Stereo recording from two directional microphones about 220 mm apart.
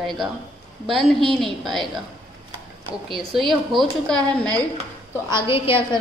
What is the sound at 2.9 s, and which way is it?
A woman's voice, centre (ahead or behind).